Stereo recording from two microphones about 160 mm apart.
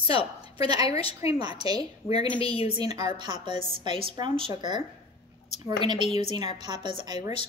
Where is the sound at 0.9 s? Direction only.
20° right (ahead or behind).